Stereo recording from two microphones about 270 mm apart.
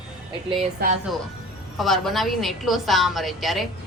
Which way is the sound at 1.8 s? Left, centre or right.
Centre.